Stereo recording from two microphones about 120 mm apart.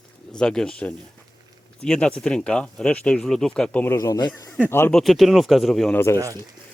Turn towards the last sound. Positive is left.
turn(degrees=20)  # may be behind; listen again after turning